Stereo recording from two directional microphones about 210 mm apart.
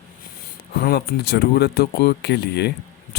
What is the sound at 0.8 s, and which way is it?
Speech, 45° left (ahead or behind).